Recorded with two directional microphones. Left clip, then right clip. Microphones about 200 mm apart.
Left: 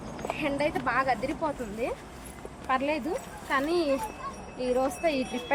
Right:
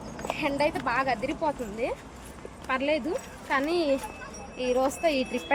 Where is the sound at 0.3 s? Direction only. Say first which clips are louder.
Right 2 dB; centre (ahead or behind).